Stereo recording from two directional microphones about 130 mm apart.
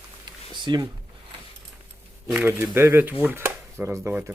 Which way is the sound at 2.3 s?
15° right (ahead or behind).